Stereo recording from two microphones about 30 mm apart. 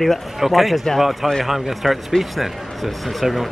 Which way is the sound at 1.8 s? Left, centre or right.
Centre.